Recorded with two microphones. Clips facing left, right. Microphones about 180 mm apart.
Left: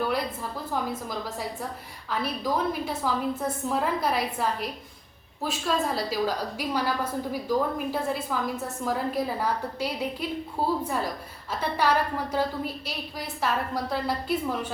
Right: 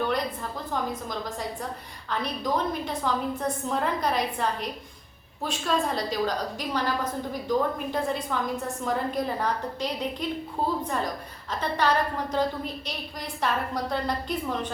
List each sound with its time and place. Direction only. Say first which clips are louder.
0.7 s a woman's voice: even; 5° left (ahead or behind)